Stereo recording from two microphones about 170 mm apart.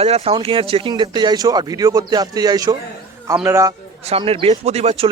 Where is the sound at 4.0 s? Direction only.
35° right (ahead or behind).